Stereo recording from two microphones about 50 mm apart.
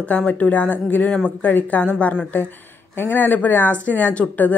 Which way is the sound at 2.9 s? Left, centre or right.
Left.